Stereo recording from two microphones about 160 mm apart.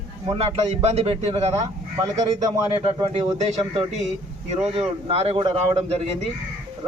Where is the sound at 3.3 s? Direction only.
45° right (ahead or behind); by 5.7 s 30° right (ahead or behind).